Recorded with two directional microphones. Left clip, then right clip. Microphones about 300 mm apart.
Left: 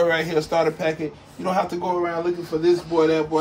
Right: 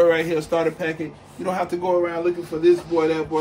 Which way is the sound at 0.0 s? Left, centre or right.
Centre.